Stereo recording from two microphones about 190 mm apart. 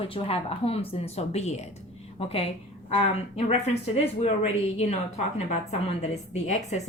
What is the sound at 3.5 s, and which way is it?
Speech, 35° left (ahead or behind).